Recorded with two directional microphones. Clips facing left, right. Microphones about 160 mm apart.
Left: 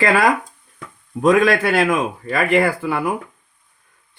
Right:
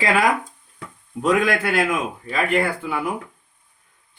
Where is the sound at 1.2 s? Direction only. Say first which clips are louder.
Left 5 dB; 75° left (ahead or behind).